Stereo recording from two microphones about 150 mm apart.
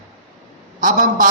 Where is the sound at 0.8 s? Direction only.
60° right (ahead or behind).